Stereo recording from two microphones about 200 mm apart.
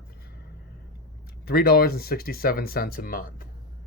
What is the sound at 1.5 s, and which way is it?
Speech, 50° left (ahead or behind).